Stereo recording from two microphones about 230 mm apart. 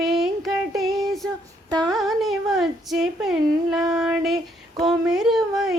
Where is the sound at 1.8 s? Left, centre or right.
Centre.